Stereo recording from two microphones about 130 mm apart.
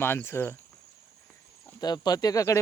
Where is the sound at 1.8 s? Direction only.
30° left (ahead or behind).